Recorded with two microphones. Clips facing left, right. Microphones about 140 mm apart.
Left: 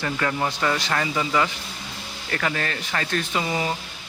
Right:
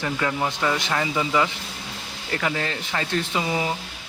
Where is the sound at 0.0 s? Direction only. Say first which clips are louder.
Even; 5° right (ahead or behind).